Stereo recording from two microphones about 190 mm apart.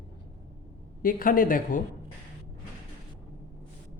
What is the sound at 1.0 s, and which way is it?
Speech, 45° left (ahead or behind).